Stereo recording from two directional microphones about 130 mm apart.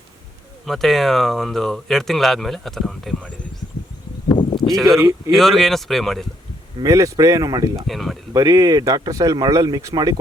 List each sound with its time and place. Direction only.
0.6 s speech: centre (ahead or behind)
4.5 s speech: centre (ahead or behind)
4.9 s speech: 25° right (ahead or behind)
5.3 s speech: centre (ahead or behind)
6.8 s speech: 25° right (ahead or behind)
7.8 s speech: centre (ahead or behind)
8.3 s speech: 25° right (ahead or behind)